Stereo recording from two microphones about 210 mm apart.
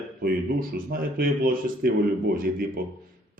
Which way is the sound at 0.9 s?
45° right (ahead or behind).